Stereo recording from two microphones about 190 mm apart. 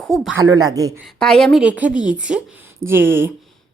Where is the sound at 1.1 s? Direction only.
5° left (ahead or behind).